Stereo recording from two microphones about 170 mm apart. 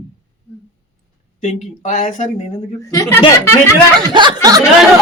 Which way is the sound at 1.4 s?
45° left (ahead or behind).